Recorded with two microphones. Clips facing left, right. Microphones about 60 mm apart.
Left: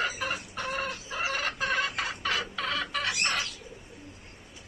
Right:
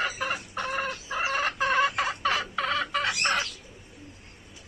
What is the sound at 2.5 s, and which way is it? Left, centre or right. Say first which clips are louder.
Chicken: right 4 dB; centre.